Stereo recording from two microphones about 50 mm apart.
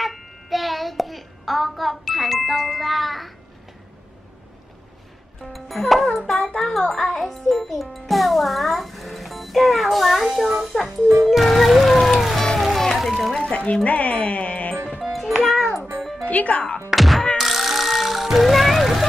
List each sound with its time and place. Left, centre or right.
0.0 s child singing: centre
5.4 s a child's voice: centre
6.1 s child singing: centre
6.8 s a child's voice: centre
11.2 s music: centre
13.8 s speech: left
15.0 s music: centre
16.3 s speech: left
16.9 s thunk: centre
17.4 s music: centre